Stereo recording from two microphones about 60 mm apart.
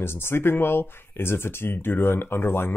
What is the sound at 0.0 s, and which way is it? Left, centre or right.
Speech, left.